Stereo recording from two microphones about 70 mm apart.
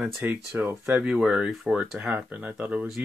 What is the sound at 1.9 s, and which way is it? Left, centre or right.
Speech, right.